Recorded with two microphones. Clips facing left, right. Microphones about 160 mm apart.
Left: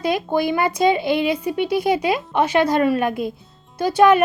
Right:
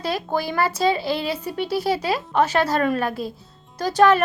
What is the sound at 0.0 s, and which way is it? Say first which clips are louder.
Speech: left 5 dB; 15° left (ahead or behind).